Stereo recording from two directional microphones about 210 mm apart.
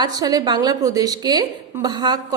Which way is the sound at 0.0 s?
20° right (ahead or behind).